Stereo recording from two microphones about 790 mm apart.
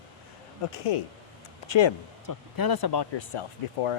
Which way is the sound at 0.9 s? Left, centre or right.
Left.